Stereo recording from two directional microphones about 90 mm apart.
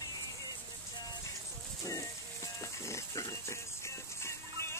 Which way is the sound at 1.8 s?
35° left (ahead or behind).